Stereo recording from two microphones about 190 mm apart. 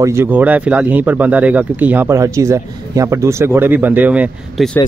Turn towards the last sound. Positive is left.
turn(degrees=0)  # may be behind; listen again after turning